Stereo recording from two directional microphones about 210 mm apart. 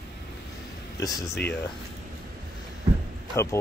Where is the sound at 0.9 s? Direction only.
15° left (ahead or behind).